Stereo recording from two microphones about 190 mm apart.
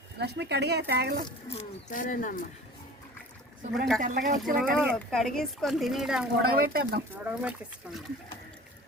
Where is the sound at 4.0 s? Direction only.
50° right (ahead or behind).